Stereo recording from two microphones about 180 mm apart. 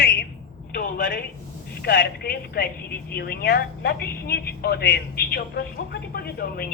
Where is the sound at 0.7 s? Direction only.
50° left (ahead or behind).